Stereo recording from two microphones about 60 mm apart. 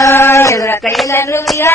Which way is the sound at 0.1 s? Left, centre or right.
Left.